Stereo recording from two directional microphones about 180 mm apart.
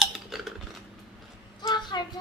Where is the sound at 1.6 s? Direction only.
25° left (ahead or behind).